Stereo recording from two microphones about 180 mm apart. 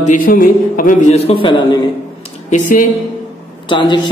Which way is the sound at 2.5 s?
45° left (ahead or behind).